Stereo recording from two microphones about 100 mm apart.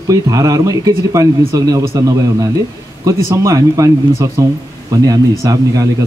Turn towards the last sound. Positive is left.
turn(degrees=-35)  # may be behind; listen again after turning